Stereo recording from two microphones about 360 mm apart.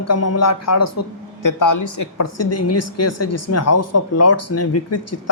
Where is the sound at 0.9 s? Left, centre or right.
Left.